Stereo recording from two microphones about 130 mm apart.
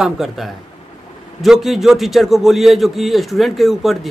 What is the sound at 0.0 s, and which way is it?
A man's voice, centre (ahead or behind).